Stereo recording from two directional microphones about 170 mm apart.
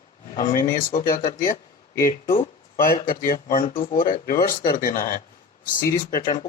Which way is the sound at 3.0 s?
55° left (ahead or behind).